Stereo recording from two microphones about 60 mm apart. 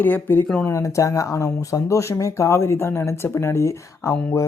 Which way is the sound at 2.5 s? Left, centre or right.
Left.